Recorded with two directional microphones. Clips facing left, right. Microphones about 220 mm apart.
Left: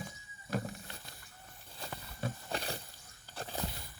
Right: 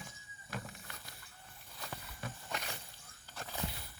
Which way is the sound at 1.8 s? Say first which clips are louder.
Left 5 dB; 35° left (ahead or behind).